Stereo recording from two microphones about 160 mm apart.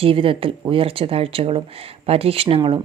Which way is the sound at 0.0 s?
35° right (ahead or behind).